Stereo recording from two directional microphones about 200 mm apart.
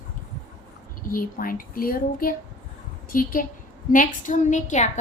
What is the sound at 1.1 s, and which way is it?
Speech, 45° left (ahead or behind).